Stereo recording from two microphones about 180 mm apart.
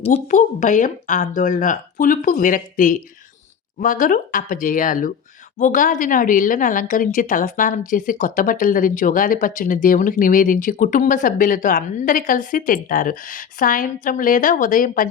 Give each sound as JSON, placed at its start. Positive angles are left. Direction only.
{"t": 0.0, "sound": "a woman's voice", "side_deg": 40}